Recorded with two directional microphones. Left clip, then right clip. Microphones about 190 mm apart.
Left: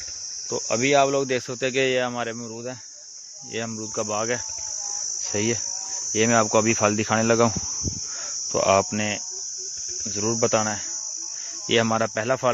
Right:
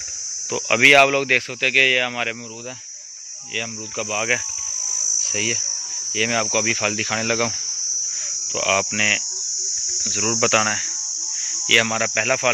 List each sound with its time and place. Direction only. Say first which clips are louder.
0.5 s speech: right 8 dB; 5° left (ahead or behind)
1.2 s cricket: right 6 dB; 30° left (ahead or behind)
3.5 s cricket: right 2 dB; 35° left (ahead or behind)
6.1 s cricket: left 1 dB; 45° left (ahead or behind); by 9.2 s 25° left (ahead or behind)
10.0 s cricket: right 2 dB; 15° left (ahead or behind)
11.6 s cricket: right 4 dB; 30° left (ahead or behind)